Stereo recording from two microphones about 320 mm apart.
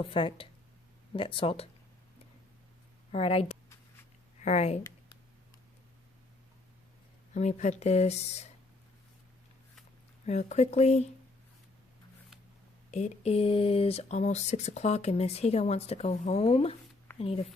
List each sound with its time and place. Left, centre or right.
0.0 s speech: centre
3.1 s speech: centre
7.3 s speech: left
10.2 s speech: left
12.9 s speech: left